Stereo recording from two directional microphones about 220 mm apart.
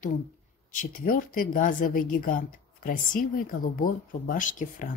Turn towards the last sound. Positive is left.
turn(degrees=35)  # may be behind; listen again after turning